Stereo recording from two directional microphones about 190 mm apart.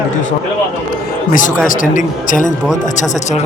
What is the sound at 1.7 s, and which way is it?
Speech, 45° left (ahead or behind).